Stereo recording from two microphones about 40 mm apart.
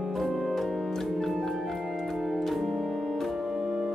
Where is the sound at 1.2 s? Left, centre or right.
Centre.